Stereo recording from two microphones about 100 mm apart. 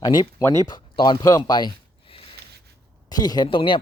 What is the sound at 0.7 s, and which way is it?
Speech, 50° left (ahead or behind).